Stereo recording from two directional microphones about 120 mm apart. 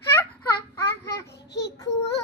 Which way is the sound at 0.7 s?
20° left (ahead or behind).